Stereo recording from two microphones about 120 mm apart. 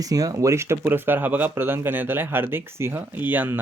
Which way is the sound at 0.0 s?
30° right (ahead or behind).